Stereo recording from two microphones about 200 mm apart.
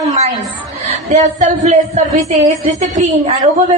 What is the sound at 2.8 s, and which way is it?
Speech, 35° right (ahead or behind).